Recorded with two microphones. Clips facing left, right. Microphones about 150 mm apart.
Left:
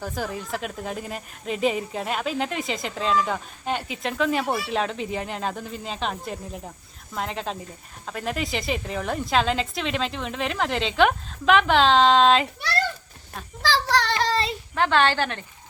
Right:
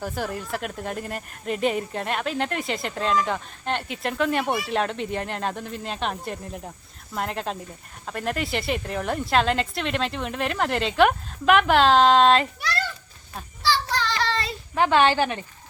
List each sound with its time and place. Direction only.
0.0 s speech: centre (ahead or behind)
13.6 s a sound: 90° left
14.8 s a woman's voice: 10° right (ahead or behind)